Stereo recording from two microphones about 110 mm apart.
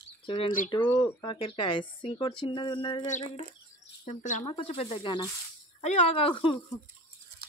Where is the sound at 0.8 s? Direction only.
25° left (ahead or behind).